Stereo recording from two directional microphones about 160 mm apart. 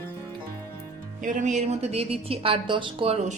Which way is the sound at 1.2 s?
50° right (ahead or behind).